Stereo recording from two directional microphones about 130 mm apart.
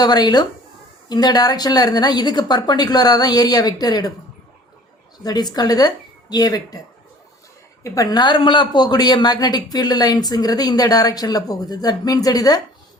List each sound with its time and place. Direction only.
0.0 s speech: 30° left (ahead or behind)
5.2 s speech: 30° left (ahead or behind)
7.9 s speech: 25° left (ahead or behind)